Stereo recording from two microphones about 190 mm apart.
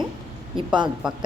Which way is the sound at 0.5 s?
25° right (ahead or behind).